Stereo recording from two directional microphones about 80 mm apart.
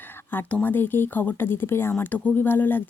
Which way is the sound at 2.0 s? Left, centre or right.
Centre.